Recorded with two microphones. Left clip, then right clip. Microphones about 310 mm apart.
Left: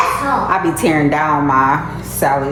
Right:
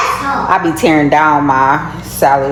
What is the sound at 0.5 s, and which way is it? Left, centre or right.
A woman's voice, centre.